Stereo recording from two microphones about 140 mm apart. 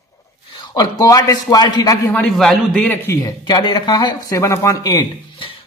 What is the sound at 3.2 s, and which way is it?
Speech, 30° left (ahead or behind).